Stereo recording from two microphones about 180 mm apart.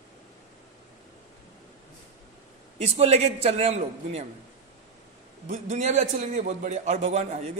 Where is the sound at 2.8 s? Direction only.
35° right (ahead or behind).